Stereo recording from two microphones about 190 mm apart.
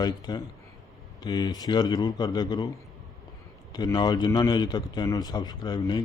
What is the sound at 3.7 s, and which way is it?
Speech, 20° left (ahead or behind).